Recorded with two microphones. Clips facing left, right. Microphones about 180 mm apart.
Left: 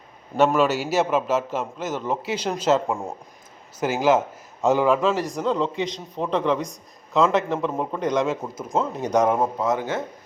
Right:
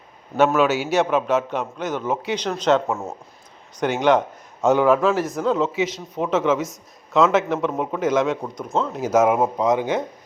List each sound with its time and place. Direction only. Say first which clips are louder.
0.3 s speech: right 1 dB; centre (ahead or behind)
9.6 s speech: right 4 dB; 15° right (ahead or behind)